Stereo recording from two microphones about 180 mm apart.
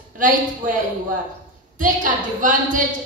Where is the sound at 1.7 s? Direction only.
45° right (ahead or behind).